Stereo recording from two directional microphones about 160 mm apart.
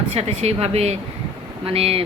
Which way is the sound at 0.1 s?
40° right (ahead or behind).